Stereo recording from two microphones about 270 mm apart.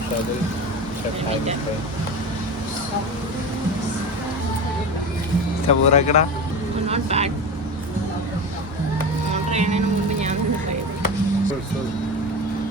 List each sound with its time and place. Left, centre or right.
5.6 s speech: left
6.8 s speech: right
9.3 s music: right